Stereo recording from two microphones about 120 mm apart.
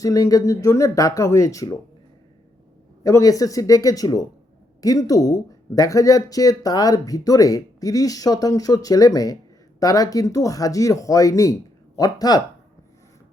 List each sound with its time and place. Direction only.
0.0 s speech: 30° left (ahead or behind)
3.0 s speech: 30° left (ahead or behind)